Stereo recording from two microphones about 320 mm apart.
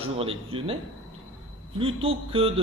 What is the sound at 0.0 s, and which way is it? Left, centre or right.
Speech, centre.